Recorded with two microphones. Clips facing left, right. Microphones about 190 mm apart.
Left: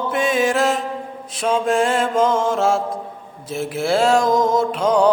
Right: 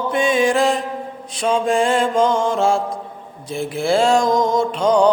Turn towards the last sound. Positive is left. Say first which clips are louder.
# right 1 dB
turn(degrees=5)  # may be behind; listen again after turning